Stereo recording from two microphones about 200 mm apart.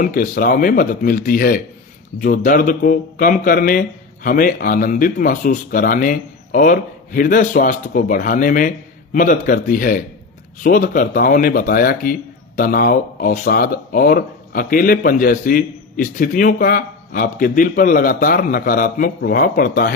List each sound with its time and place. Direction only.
0.0 s speech: 40° left (ahead or behind)